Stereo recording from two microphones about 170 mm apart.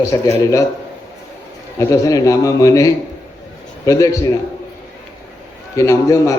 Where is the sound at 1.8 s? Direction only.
20° left (ahead or behind).